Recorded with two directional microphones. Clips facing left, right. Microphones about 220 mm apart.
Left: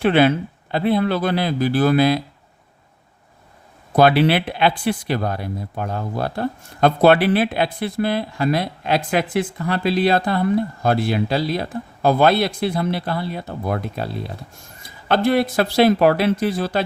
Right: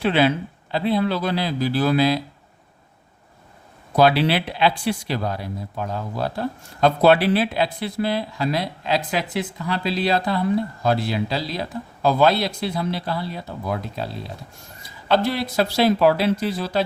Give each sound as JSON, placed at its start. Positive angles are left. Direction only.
{"t": 0.0, "sound": "speech", "side_deg": 55}
{"t": 3.9, "sound": "speech", "side_deg": 55}